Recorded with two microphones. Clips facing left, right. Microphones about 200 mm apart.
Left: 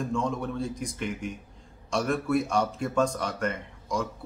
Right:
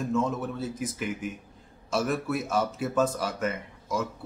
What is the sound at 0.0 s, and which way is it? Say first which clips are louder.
Speech: right 1 dB; 5° right (ahead or behind).